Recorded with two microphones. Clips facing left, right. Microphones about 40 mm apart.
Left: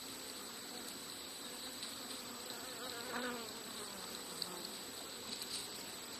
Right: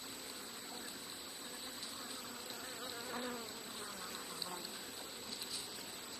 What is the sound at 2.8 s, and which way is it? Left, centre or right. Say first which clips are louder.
Bee: left 1 dB; centre.